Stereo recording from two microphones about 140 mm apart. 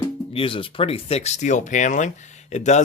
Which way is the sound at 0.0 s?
40° left (ahead or behind).